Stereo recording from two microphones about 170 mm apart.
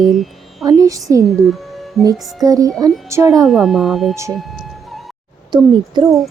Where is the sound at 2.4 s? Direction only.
20° right (ahead or behind).